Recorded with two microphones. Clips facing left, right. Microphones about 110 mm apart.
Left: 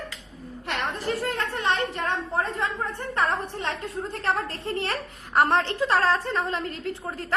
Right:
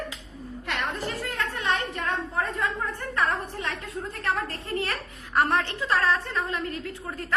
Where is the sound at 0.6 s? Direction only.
35° left (ahead or behind).